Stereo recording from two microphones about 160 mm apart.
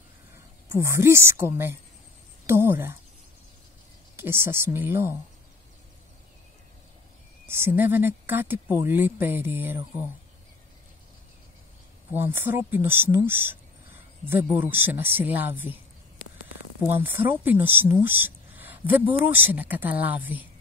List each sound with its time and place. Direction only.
0.7 s speech: 15° right (ahead or behind)
2.4 s a sound: 15° right (ahead or behind)
4.2 s speech: 15° right (ahead or behind)
7.4 s speech: 15° right (ahead or behind)
12.1 s speech: 15° right (ahead or behind)
16.8 s speech: 15° right (ahead or behind)